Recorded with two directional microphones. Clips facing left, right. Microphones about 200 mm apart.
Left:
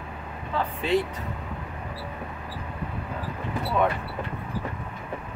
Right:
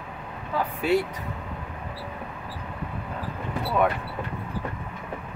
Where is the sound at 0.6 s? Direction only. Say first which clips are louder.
Right 1 dB; 10° right (ahead or behind).